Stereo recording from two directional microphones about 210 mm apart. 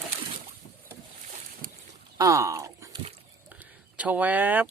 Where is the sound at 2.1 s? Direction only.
15° right (ahead or behind).